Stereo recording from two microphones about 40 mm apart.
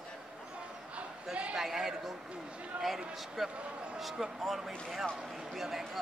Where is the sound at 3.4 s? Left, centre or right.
Right.